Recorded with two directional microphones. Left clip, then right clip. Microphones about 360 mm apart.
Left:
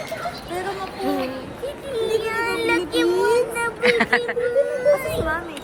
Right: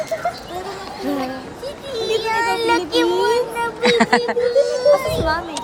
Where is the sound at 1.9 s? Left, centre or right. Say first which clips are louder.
Right 3 dB; right.